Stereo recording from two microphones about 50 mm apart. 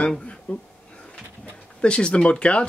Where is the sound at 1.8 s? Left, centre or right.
Left.